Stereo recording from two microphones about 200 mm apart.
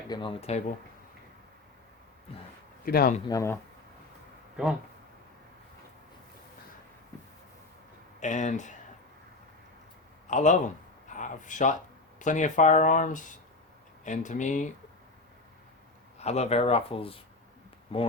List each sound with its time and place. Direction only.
0.1 s speech: 25° left (ahead or behind)
2.8 s speech: 50° left (ahead or behind)
3.2 s speech: 15° left (ahead or behind)
8.2 s speech: 35° left (ahead or behind)
10.2 s a man's voice: 40° left (ahead or behind)
16.1 s speech: 30° left (ahead or behind)